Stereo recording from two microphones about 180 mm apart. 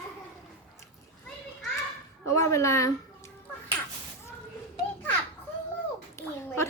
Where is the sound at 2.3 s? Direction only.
15° left (ahead or behind).